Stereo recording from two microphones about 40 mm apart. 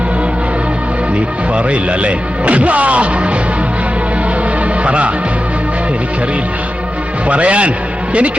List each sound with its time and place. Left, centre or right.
1.5 s speech: right
4.8 s speech: right
7.3 s speech: right